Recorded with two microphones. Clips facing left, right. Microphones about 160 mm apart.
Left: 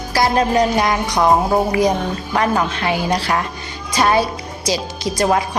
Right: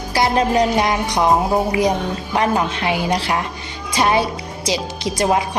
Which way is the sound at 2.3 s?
20° right (ahead or behind).